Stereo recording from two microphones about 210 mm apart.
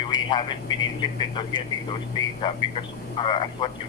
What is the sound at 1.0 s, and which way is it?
Speech, 20° left (ahead or behind).